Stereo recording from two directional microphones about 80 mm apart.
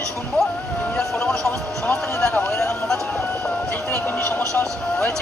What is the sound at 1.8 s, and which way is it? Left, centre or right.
Run, centre.